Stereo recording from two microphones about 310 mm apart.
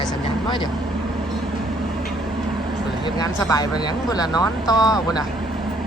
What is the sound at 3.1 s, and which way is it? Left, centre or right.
Speech, centre.